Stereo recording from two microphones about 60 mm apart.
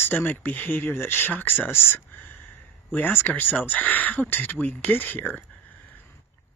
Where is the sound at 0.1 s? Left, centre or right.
Left.